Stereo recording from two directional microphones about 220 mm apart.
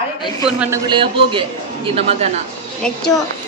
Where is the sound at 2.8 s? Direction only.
5° left (ahead or behind).